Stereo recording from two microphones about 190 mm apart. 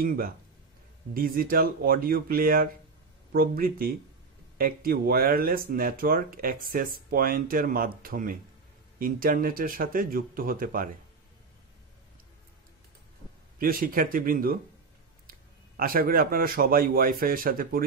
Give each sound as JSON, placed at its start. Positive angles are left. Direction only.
{"t": 1.1, "sound": "speech", "side_deg": -50}
{"t": 13.6, "sound": "speech", "side_deg": -50}
{"t": 15.8, "sound": "speech", "side_deg": -50}